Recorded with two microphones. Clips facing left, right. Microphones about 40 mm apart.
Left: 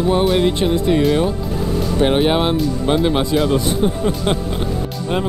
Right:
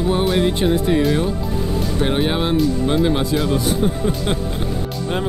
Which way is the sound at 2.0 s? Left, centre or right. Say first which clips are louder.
Left 5 dB; left.